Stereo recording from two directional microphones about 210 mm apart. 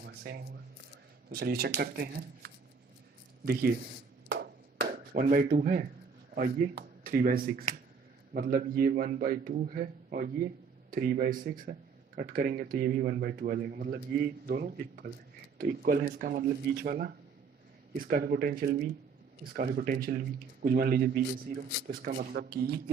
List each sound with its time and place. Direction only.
0.0 s a sound: 50° right (ahead or behind)
1.3 s a man's voice: 45° right (ahead or behind)
4.3 s chop: 50° right (ahead or behind)
6.3 s a man's voice: 45° right (ahead or behind)